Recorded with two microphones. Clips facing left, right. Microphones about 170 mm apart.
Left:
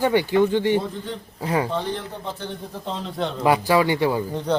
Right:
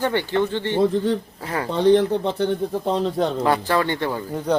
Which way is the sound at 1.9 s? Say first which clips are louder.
Right 13 dB; 80° right.